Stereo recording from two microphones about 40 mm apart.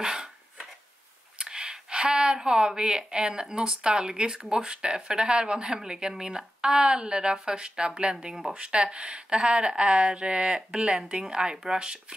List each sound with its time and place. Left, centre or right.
0.0 s dog: centre
1.4 s speech: centre